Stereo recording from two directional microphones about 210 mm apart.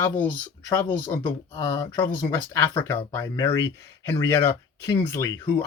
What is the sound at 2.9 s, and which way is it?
Speech, 15° left (ahead or behind).